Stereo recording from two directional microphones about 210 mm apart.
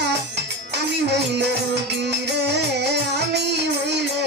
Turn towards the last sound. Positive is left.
turn(degrees=-55)  # may be behind; listen again after turning